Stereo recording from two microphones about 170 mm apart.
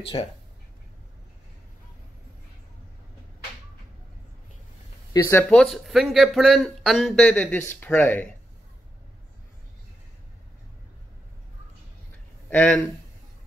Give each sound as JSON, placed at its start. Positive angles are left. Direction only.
{"t": 0.1, "sound": "speech", "side_deg": 30}
{"t": 5.1, "sound": "speech", "side_deg": 20}
{"t": 5.5, "sound": "speech", "side_deg": 5}
{"t": 12.4, "sound": "speech", "side_deg": 10}